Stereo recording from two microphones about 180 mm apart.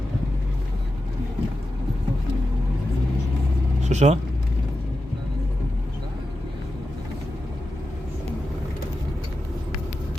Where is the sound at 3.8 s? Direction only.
40° right (ahead or behind).